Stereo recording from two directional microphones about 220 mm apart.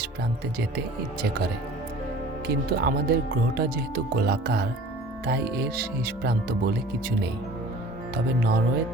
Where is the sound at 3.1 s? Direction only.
45° right (ahead or behind).